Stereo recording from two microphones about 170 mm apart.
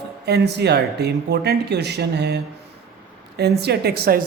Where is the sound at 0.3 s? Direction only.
75° right (ahead or behind).